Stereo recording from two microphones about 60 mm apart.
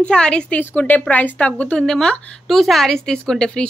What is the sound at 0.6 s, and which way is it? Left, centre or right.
A woman's voice, left.